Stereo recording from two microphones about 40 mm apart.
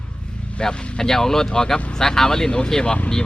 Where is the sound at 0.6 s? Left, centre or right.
Left.